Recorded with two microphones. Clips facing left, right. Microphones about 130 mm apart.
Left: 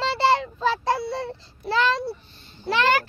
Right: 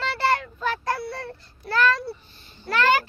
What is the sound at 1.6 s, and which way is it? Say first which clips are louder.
Speech: even; 25° left (ahead or behind).